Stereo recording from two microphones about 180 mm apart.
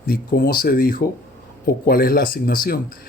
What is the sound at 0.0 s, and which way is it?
Speech, 55° left (ahead or behind).